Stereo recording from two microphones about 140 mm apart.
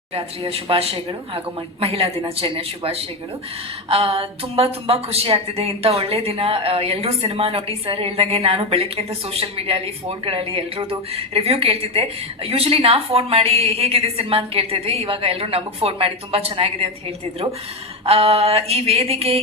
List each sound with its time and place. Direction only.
0.1 s a woman's voice: 45° right (ahead or behind)
18.0 s a woman's voice: 45° right (ahead or behind)